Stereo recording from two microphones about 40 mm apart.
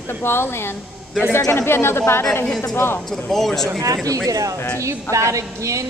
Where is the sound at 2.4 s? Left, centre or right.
Centre.